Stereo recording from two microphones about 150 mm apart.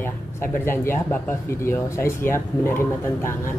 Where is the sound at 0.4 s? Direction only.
15° left (ahead or behind).